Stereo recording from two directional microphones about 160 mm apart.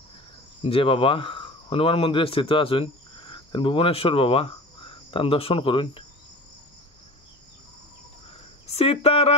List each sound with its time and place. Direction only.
0.6 s speech: 35° left (ahead or behind)
8.6 s speech: 40° left (ahead or behind)